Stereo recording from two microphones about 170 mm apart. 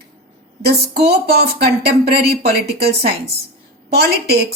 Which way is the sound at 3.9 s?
70° right (ahead or behind).